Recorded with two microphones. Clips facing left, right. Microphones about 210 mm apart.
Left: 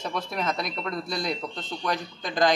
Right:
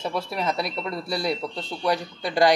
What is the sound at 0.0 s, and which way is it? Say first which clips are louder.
Speech: right 3 dB; 5° right (ahead or behind).